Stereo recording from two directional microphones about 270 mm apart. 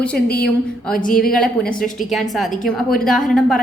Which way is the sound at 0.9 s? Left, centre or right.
Left.